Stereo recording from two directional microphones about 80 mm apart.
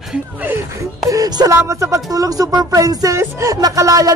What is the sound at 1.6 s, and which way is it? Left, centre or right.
Speech, right.